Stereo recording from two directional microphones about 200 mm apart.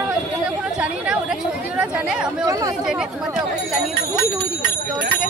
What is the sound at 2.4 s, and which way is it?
Speech, 15° right (ahead or behind).